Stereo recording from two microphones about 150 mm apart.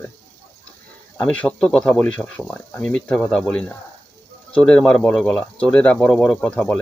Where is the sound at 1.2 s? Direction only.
10° left (ahead or behind).